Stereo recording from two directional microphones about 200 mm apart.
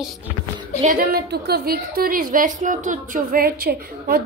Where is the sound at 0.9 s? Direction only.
50° right (ahead or behind).